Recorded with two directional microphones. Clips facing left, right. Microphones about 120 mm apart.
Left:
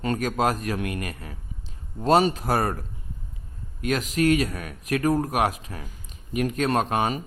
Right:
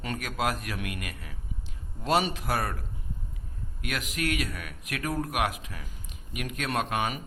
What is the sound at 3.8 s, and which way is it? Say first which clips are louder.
A man's voice: left 10 dB; 35° left (ahead or behind).